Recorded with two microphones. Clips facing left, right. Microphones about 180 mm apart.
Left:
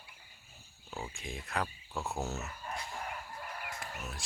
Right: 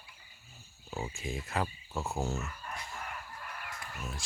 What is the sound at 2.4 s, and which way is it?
Chicken, 20° left (ahead or behind).